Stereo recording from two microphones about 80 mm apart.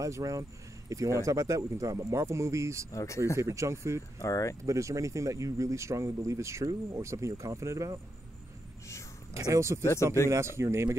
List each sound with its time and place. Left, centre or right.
0.0 s speech: right
2.9 s speech: left
3.3 s speech: right
4.2 s speech: left
4.6 s speech: right
9.3 s speech: right